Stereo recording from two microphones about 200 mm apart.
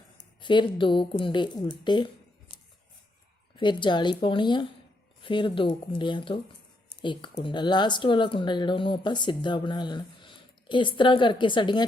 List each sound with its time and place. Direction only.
0.3 s speech: 25° left (ahead or behind)
3.6 s speech: 25° left (ahead or behind)